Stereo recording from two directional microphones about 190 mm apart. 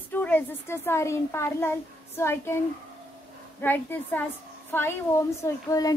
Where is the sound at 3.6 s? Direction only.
10° left (ahead or behind).